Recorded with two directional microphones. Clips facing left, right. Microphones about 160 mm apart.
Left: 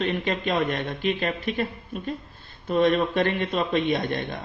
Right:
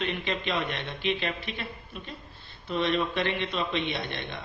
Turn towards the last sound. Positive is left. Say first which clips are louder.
# left 8 dB
turn(degrees=45)  # may be behind; listen again after turning